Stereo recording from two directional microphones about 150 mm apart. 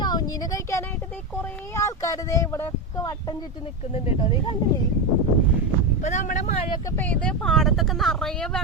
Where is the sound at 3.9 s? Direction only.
40° left (ahead or behind).